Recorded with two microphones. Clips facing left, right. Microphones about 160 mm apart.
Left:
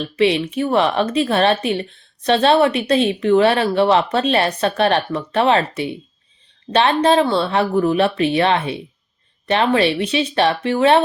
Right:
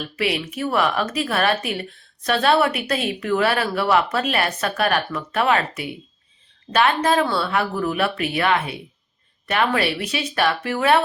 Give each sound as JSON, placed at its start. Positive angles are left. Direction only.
{"t": 0.0, "sound": "a woman's voice", "side_deg": 25}